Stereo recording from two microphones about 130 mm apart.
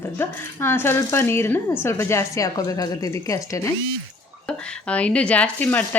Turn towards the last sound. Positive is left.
turn(degrees=15)  # may be behind; listen again after turning